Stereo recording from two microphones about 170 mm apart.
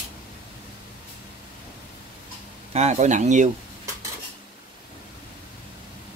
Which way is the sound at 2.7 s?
40° right (ahead or behind).